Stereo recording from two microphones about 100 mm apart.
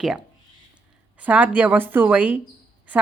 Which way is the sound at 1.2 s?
15° right (ahead or behind).